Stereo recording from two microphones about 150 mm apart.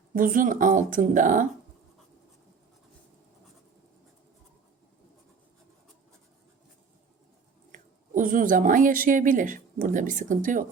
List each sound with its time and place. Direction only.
0.1 s a woman's voice: 65° right (ahead or behind)
7.7 s speech: 60° right (ahead or behind)